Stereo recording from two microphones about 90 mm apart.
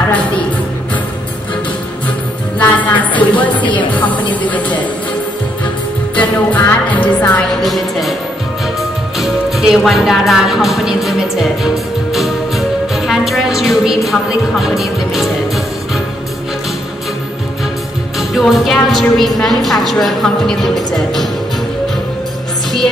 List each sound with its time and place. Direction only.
2.6 s music: 15° left (ahead or behind)
6.1 s music: 15° left (ahead or behind)
7.6 s a woman's voice: centre (ahead or behind)
9.2 s music: 5° right (ahead or behind)
18.3 s a woman's voice: centre (ahead or behind)